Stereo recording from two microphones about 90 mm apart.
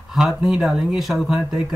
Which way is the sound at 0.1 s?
5° right (ahead or behind).